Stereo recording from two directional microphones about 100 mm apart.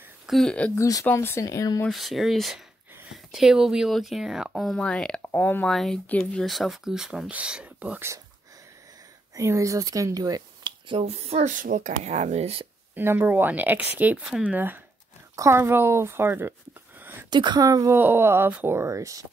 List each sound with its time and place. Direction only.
0.3 s speech: 5° left (ahead or behind)
0.7 s speech: 35° left (ahead or behind)
1.0 s speech: 25° left (ahead or behind)
1.9 s speech: centre (ahead or behind)
4.7 s speech: 10° left (ahead or behind)
5.7 s speech: centre (ahead or behind); by 8.0 s 15° right (ahead or behind)
9.3 s speech: 30° right (ahead or behind)
10.9 s speech: 85° right
12.9 s speech: 20° right (ahead or behind)
15.3 s speech: 30° right (ahead or behind)
17.0 s a sound: 20° right (ahead or behind)
17.3 s speech: 45° right (ahead or behind)
17.6 s speech: 35° right (ahead or behind)
17.9 s speech: 20° right (ahead or behind)